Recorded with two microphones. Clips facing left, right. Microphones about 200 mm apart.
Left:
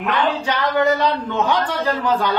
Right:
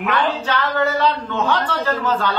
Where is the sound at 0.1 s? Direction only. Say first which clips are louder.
Left 1 dB; 15° left (ahead or behind).